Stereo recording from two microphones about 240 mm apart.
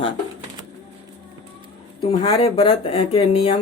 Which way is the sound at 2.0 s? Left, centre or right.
Left.